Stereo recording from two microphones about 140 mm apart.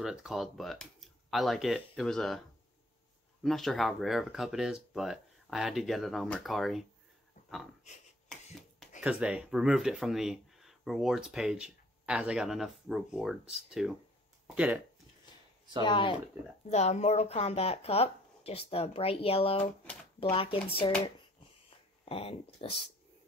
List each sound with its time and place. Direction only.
0.0 s speech: 5° right (ahead or behind)
3.4 s speech: centre (ahead or behind)
9.0 s speech: 5° right (ahead or behind)
15.8 s speech: 35° left (ahead or behind)
16.6 s speech: 50° left (ahead or behind)
21.6 s a sound: 45° left (ahead or behind)